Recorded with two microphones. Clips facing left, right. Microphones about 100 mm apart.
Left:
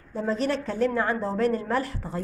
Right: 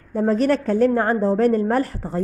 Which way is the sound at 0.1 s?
50° right (ahead or behind).